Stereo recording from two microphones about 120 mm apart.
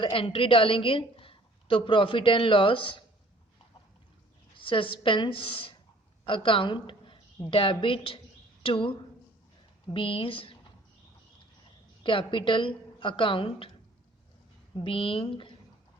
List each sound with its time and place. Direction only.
0.0 s a woman's voice: 45° left (ahead or behind)
4.5 s a woman's voice: 45° left (ahead or behind)
12.0 s a woman's voice: 45° left (ahead or behind)
14.8 s a woman's voice: 50° left (ahead or behind)